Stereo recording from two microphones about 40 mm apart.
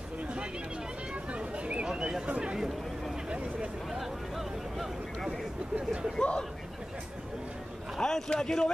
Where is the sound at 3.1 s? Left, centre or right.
Right.